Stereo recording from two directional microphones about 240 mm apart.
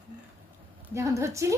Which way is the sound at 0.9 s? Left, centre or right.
Centre.